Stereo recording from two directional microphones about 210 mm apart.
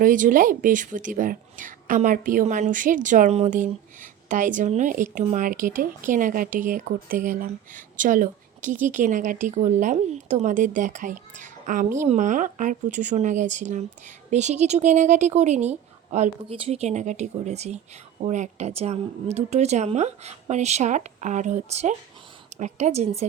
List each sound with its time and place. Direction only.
0.0 s speech: 40° right (ahead or behind)